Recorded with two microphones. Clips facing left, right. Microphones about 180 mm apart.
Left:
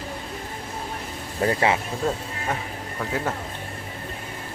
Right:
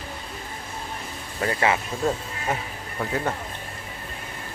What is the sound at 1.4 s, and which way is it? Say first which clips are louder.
Speech: left 2 dB; 30° left (ahead or behind).